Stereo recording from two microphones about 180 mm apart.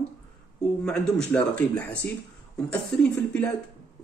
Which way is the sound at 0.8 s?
5° left (ahead or behind).